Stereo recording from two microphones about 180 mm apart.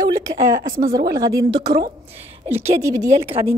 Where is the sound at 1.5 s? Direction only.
65° right (ahead or behind).